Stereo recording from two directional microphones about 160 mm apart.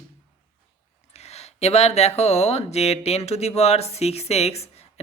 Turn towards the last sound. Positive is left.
turn(degrees=40)  # may be behind; listen again after turning